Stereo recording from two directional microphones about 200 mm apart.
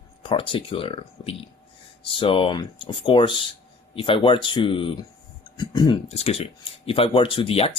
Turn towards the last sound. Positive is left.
turn(degrees=25)  # may be behind; listen again after turning